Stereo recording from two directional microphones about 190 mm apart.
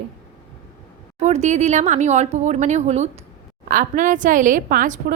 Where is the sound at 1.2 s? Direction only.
35° right (ahead or behind).